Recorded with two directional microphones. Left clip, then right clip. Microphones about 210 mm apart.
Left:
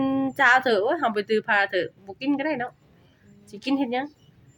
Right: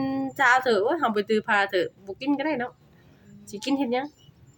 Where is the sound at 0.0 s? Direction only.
10° left (ahead or behind).